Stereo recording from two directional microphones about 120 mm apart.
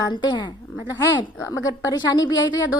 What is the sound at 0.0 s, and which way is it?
Speech, 35° left (ahead or behind).